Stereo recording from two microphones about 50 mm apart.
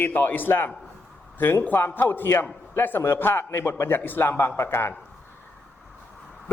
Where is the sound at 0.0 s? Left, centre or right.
Left.